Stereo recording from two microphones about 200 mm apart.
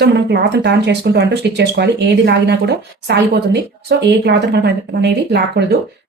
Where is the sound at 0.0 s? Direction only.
55° right (ahead or behind).